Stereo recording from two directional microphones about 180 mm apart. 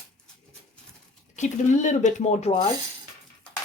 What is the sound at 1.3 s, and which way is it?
Speech, 40° left (ahead or behind).